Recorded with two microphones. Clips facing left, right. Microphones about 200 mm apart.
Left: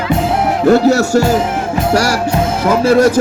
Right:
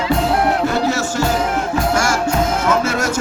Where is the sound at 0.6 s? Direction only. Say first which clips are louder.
Left 9 dB; 40° left (ahead or behind).